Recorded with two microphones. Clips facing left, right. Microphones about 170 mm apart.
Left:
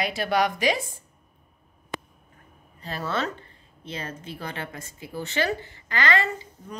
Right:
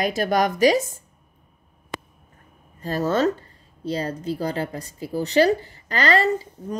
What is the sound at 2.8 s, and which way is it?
A woman's voice, 40° right (ahead or behind).